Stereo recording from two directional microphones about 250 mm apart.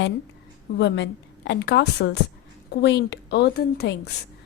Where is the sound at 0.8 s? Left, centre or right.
Left.